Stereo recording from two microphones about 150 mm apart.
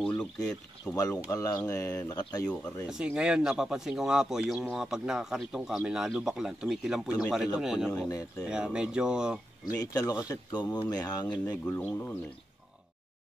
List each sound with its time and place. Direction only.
0.0 s speech: 5° left (ahead or behind)
0.9 s speech: 25° left (ahead or behind)
2.4 s speech: 10° left (ahead or behind)
2.9 s speech: 5° right (ahead or behind)
9.8 s speech: 25° left (ahead or behind)
11.4 s speech: 15° left (ahead or behind)